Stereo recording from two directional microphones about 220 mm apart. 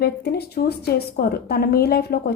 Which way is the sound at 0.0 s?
45° left (ahead or behind).